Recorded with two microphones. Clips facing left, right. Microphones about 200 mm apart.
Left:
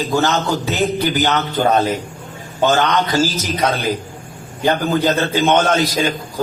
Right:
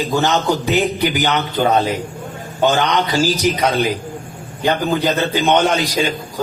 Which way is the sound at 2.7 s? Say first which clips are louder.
Left 1 dB; 15° right (ahead or behind).